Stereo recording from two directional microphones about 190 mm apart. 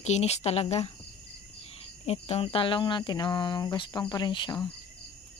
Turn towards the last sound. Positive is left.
turn(degrees=20)  # may be behind; listen again after turning